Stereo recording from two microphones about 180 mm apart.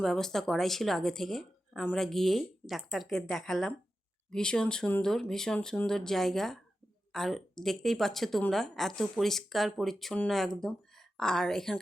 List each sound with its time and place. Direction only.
0.0 s speech: 5° left (ahead or behind)